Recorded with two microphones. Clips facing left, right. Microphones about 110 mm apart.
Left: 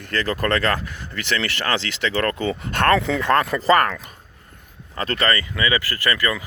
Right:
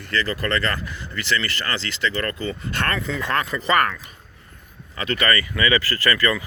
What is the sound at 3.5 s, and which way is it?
Speech, 40° left (ahead or behind).